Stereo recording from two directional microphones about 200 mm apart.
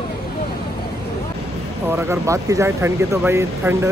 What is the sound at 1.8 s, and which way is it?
Speech, 15° right (ahead or behind).